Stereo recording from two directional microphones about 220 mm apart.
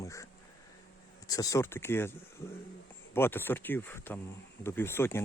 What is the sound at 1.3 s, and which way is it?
Speech, 15° left (ahead or behind).